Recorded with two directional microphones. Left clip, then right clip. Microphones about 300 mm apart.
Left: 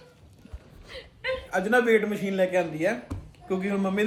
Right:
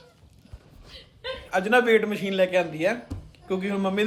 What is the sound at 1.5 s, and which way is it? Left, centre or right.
Speech, centre.